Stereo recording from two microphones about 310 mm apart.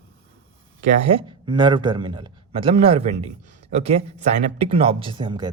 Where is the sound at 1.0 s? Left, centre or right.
Centre.